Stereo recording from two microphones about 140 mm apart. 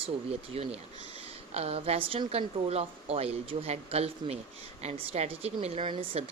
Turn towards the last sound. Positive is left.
turn(degrees=-40)  # may be behind; listen again after turning